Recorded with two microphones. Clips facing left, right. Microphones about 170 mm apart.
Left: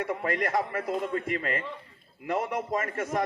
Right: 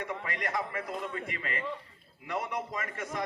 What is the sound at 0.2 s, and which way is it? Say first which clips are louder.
A man's voice: left 7 dB; 50° left (ahead or behind).